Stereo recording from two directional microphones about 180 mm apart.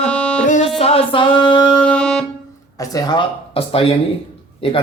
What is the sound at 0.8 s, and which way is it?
Speech, 35° left (ahead or behind).